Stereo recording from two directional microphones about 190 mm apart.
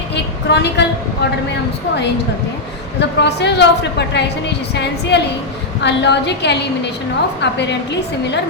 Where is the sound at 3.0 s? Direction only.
65° left (ahead or behind).